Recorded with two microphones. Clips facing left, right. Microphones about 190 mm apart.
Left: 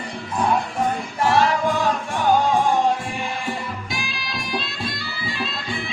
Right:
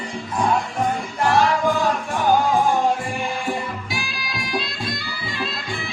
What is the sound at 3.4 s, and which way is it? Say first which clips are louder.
Music: right 2 dB; centre (ahead or behind).